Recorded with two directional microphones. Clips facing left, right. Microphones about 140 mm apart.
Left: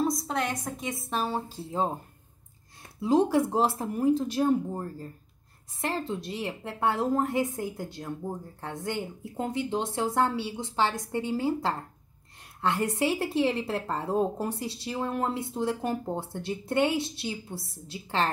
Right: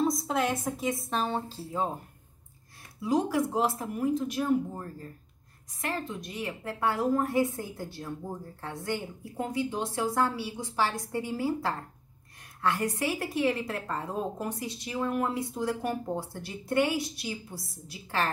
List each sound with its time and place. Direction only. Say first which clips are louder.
0.0 s a woman's voice: right 1 dB; centre (ahead or behind)
1.6 s a woman's voice: left 5 dB; 25° left (ahead or behind)
3.0 s a woman's voice: left 4 dB; 25° left (ahead or behind)